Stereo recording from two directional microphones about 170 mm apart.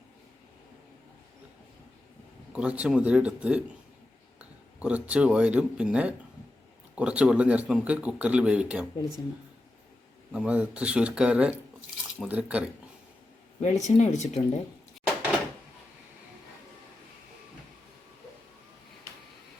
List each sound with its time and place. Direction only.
2.5 s speech: 5° right (ahead or behind)
10.3 s speech: 10° right (ahead or behind)
13.6 s speech: 40° left (ahead or behind)